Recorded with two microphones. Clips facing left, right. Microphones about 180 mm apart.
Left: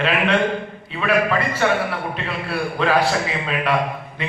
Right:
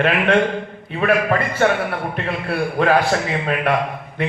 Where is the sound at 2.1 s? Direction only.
55° right (ahead or behind).